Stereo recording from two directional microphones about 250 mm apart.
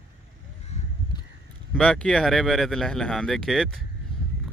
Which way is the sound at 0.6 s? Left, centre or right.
Left.